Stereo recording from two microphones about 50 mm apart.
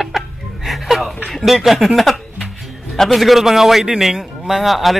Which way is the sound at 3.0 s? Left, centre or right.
Centre.